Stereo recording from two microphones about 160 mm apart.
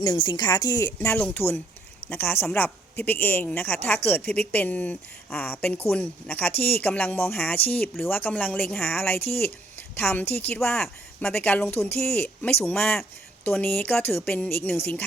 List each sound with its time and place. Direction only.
0.0 s a woman's voice: 35° left (ahead or behind); by 15.0 s 10° left (ahead or behind)